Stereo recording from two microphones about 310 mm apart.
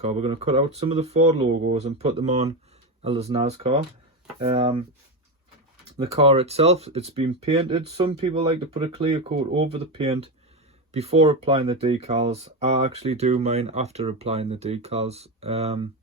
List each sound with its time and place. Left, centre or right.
0.0 s speech: centre
6.1 s speech: centre